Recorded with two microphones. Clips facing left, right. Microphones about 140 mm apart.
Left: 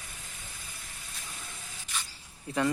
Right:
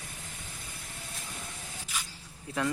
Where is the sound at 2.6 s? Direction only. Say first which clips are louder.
Left 3 dB; centre (ahead or behind).